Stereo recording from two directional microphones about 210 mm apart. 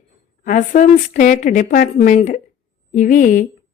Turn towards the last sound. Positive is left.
turn(degrees=40)  # may be behind; listen again after turning